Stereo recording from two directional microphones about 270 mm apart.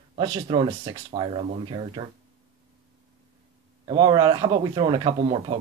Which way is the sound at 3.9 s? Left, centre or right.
Centre.